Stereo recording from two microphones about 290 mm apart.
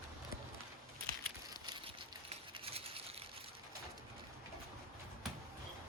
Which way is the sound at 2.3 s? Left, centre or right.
Centre.